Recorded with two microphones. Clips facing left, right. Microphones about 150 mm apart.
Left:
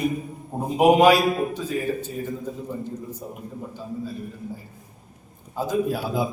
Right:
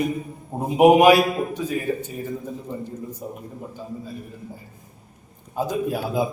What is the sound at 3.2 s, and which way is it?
Speech, 15° right (ahead or behind).